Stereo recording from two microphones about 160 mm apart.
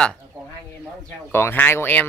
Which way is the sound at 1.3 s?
15° left (ahead or behind).